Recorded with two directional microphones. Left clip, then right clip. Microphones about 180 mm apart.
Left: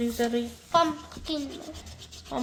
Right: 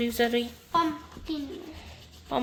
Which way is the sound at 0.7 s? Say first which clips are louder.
Left 3 dB; 75° left (ahead or behind).